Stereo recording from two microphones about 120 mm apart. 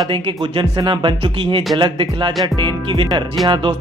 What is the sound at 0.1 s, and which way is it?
Speech, 45° right (ahead or behind).